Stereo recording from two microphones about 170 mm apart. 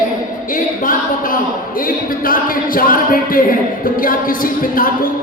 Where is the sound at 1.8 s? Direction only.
55° left (ahead or behind).